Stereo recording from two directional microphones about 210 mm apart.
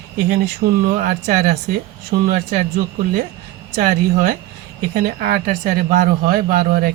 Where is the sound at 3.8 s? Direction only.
40° right (ahead or behind).